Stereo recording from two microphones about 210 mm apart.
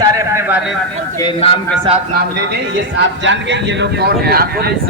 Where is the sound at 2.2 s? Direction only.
50° right (ahead or behind).